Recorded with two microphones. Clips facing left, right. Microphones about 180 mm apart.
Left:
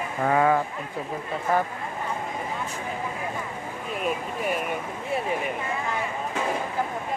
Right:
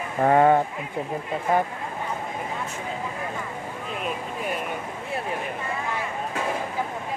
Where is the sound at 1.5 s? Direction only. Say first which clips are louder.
Right 2 dB; 20° right (ahead or behind).